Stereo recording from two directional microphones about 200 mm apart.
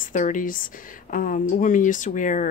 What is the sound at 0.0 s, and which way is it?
Speech, 40° left (ahead or behind).